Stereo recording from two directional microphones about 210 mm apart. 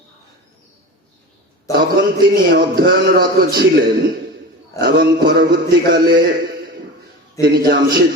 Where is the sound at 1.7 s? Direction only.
45° right (ahead or behind).